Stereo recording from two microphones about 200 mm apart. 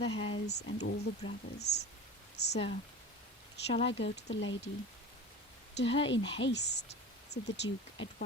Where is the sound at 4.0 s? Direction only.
65° left (ahead or behind).